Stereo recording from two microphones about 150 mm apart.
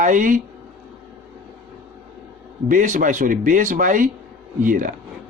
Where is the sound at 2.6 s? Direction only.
60° right (ahead or behind).